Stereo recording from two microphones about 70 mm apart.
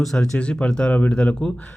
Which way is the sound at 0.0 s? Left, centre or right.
Centre.